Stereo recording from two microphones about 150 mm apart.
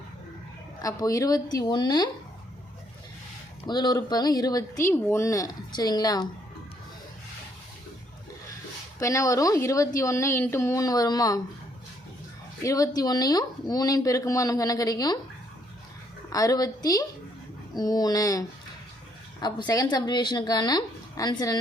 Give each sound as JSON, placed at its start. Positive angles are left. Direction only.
{"t": 0.8, "sound": "speech", "side_deg": 25}
{"t": 3.7, "sound": "speech", "side_deg": 30}
{"t": 9.0, "sound": "speech", "side_deg": 20}
{"t": 12.6, "sound": "speech", "side_deg": 25}
{"t": 16.3, "sound": "speech", "side_deg": 25}